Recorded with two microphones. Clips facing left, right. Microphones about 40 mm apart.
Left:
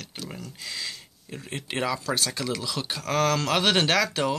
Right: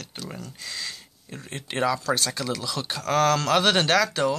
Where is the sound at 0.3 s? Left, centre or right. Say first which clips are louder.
Right 1 dB; centre.